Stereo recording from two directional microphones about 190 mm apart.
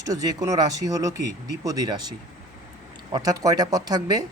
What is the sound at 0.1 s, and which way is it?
Speech, 20° right (ahead or behind).